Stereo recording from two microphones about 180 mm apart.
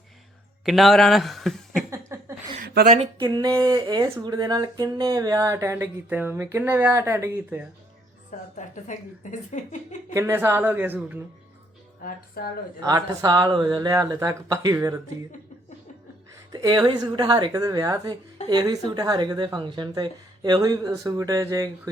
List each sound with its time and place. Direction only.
0.6 s speech: centre (ahead or behind)
1.9 s a sound: 15° right (ahead or behind)
2.6 s a woman's voice: 55° right (ahead or behind)
3.2 s speech: 25° right (ahead or behind)
8.5 s speech: 45° left (ahead or behind)
10.2 s speech: 10° right (ahead or behind)
12.0 s speech: 55° left (ahead or behind)
12.8 s speech: 20° right (ahead or behind)
16.5 s speech: 20° right (ahead or behind)